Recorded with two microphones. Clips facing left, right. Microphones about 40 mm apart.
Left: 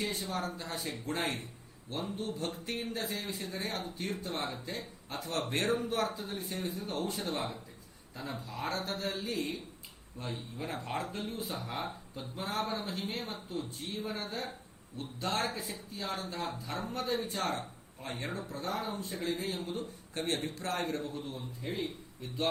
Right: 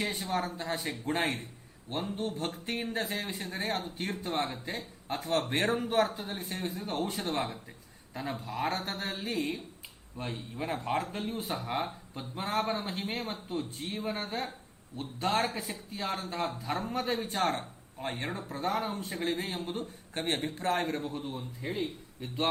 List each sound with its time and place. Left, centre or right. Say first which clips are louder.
0.0 s speech: right 3 dB; right
5.7 s speech: right 4 dB; right
12.8 s speech: right 2 dB; right
13.1 s speech: right 3 dB; right